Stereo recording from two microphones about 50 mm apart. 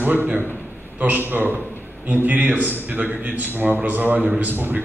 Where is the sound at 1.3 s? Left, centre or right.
Right.